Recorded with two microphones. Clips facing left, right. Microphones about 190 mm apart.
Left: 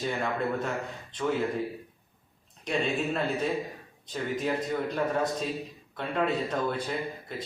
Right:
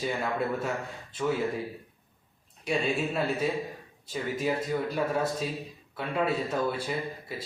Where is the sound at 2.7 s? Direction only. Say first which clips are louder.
Even; 5° right (ahead or behind).